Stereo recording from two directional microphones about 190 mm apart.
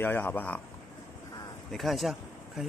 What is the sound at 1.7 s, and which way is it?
Speech, centre (ahead or behind).